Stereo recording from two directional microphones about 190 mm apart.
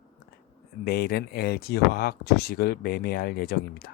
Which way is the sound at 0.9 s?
55° left (ahead or behind).